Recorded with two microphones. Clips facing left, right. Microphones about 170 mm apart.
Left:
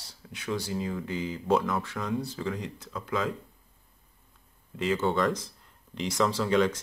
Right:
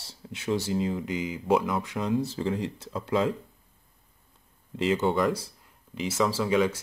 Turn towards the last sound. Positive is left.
turn(degrees=-5)  # may be behind; listen again after turning